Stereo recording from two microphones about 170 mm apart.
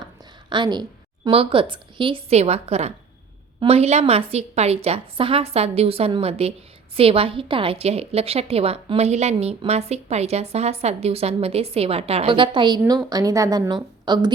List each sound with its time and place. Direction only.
0.5 s a woman's voice: 25° right (ahead or behind)